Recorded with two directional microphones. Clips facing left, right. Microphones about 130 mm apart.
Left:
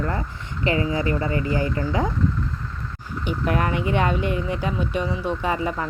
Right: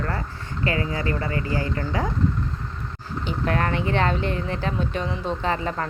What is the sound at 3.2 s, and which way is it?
Speech, 15° left (ahead or behind).